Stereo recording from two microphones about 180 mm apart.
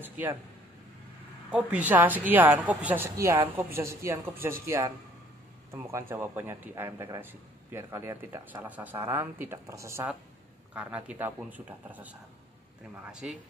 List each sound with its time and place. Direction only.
0.0 s speech: 10° right (ahead or behind)
1.5 s speech: 5° right (ahead or behind)